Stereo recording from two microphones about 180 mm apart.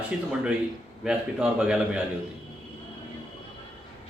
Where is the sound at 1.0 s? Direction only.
5° right (ahead or behind).